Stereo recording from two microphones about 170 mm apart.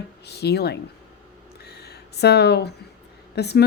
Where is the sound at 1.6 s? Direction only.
70° left (ahead or behind).